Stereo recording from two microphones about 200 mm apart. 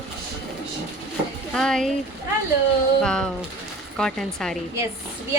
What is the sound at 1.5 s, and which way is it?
Speech, 5° left (ahead or behind).